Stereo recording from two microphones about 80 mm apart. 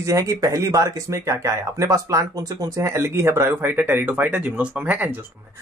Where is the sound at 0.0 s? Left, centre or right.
Right.